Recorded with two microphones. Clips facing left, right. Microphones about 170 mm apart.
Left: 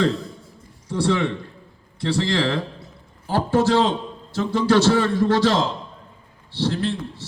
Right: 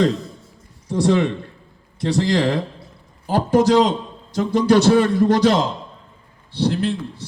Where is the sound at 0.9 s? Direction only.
20° right (ahead or behind).